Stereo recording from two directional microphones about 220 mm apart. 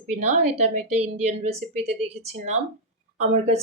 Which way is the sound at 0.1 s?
30° right (ahead or behind).